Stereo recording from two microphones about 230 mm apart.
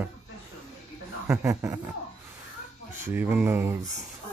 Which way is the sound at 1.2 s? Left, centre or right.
Centre.